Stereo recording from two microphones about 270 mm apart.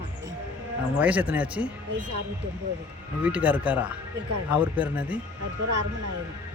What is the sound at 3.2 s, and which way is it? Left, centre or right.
Speech, centre.